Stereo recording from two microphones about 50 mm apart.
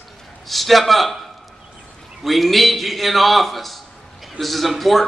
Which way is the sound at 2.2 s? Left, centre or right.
Centre.